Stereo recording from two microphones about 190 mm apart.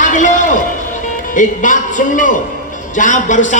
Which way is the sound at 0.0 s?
40° left (ahead or behind).